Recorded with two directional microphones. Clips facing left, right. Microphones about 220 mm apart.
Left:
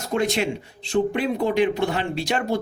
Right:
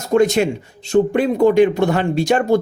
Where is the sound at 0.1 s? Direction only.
45° right (ahead or behind).